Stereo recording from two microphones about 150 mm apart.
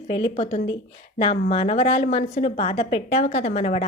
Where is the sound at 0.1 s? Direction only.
40° left (ahead or behind).